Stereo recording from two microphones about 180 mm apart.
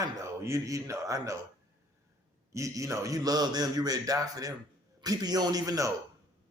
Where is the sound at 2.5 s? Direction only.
15° right (ahead or behind).